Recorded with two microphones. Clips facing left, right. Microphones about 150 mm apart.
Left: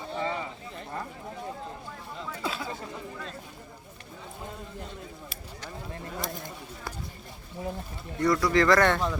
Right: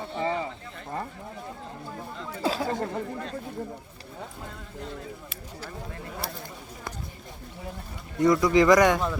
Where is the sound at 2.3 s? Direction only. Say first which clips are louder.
Right 6 dB; 35° right (ahead or behind).